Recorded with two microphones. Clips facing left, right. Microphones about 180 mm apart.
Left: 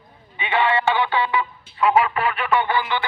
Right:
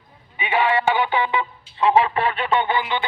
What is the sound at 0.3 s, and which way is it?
Music, 10° right (ahead or behind).